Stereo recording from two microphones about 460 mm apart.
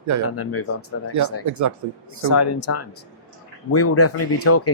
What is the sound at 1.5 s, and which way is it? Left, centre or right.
Speech, right.